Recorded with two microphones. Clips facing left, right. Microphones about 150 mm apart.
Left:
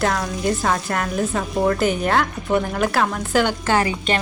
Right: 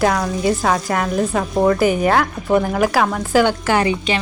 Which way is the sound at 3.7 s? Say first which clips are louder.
Even; 20° right (ahead or behind).